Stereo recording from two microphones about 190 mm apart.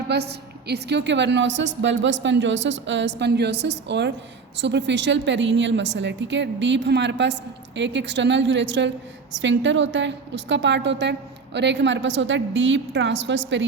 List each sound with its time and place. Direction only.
0.1 s a woman's voice: 60° right (ahead or behind)